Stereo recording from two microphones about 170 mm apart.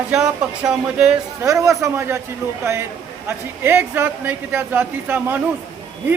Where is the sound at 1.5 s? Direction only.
20° right (ahead or behind).